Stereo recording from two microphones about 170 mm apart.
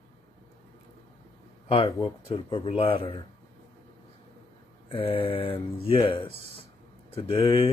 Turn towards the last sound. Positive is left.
turn(degrees=30)  # may be behind; listen again after turning